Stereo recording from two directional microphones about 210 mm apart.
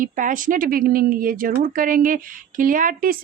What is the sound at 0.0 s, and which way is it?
Speech, 40° right (ahead or behind).